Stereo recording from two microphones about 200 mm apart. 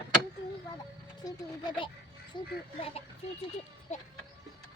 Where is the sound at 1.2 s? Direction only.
25° left (ahead or behind).